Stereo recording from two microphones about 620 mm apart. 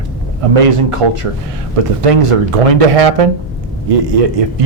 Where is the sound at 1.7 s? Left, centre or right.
Right.